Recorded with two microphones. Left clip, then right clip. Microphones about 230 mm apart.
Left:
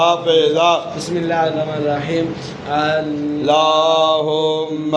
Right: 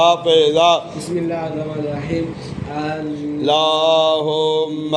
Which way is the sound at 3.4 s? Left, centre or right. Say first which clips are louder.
Left 1 dB; right.